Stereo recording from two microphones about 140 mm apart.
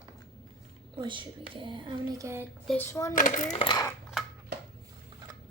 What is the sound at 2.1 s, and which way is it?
Speech, 20° right (ahead or behind).